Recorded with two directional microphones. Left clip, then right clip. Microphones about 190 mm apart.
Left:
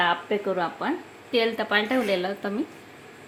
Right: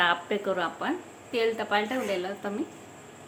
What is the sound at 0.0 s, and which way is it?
Speech, 25° left (ahead or behind).